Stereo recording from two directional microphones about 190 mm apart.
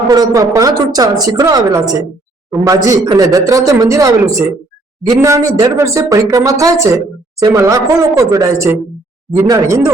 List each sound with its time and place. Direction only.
0.1 s a woman's voice: 20° right (ahead or behind)